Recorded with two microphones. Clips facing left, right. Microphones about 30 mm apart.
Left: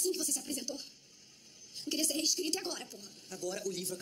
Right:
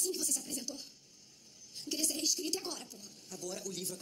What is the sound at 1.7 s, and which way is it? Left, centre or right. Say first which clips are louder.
A woman's voice: left 3 dB; left.